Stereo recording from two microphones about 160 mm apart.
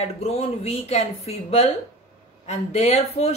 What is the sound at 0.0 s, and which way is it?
A woman's voice, 40° left (ahead or behind).